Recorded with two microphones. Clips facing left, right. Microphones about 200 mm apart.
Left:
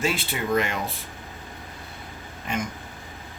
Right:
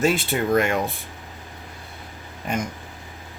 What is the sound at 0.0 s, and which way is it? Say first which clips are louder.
Speech: right 6 dB; 50° right (ahead or behind).